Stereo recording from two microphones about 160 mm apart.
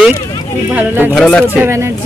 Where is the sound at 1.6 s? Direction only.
15° right (ahead or behind).